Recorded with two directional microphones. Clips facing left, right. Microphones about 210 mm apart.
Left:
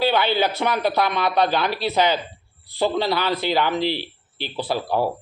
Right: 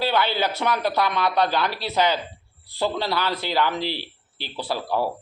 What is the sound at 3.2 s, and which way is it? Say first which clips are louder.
Speech: left 3 dB; 55° left (ahead or behind).